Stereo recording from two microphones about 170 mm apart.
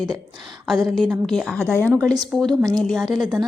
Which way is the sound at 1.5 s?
15° right (ahead or behind).